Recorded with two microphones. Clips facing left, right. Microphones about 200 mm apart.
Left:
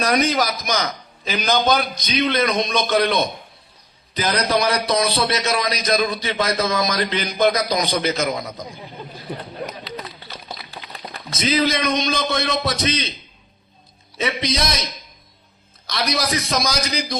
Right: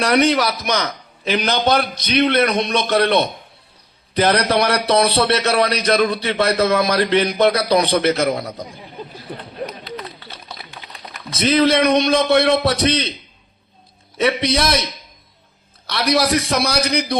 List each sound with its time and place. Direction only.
0.3 s a man's voice: 65° right (ahead or behind)
4.4 s a man's voice: 65° right (ahead or behind)
11.3 s speech: 30° right (ahead or behind)
11.7 s a man's voice: 65° right (ahead or behind)
14.2 s a man's voice: 65° right (ahead or behind)
15.9 s a man's voice: 65° right (ahead or behind)